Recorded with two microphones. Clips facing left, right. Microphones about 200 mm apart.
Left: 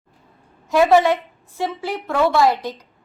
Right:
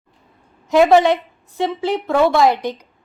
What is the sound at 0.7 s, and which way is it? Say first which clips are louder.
A woman's voice: right 2 dB; 20° right (ahead or behind).